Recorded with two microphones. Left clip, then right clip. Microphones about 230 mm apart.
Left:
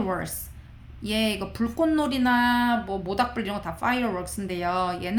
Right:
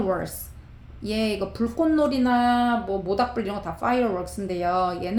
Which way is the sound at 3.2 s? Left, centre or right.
Left.